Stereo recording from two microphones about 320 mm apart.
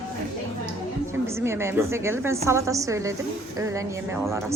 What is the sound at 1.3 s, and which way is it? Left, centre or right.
A woman's voice, centre.